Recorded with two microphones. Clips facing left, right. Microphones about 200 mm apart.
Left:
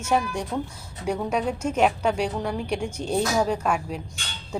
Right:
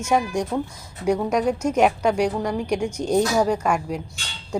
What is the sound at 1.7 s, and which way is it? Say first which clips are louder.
A woman's voice: right 2 dB; 10° right (ahead or behind).